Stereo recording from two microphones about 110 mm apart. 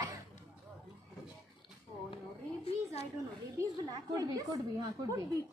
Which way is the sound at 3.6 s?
35° right (ahead or behind).